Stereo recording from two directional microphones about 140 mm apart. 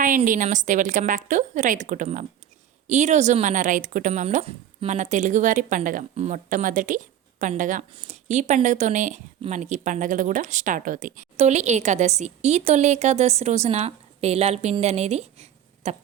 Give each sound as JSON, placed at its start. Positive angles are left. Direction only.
{"t": 0.3, "sound": "speech", "side_deg": -65}
{"t": 4.4, "sound": "speech", "side_deg": -40}
{"t": 4.9, "sound": "speech", "side_deg": -60}